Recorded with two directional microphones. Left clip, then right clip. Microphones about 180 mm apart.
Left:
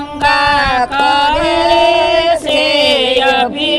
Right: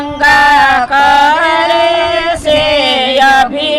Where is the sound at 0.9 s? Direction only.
35° right (ahead or behind).